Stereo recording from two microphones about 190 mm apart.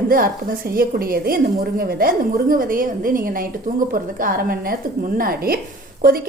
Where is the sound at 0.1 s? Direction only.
50° right (ahead or behind).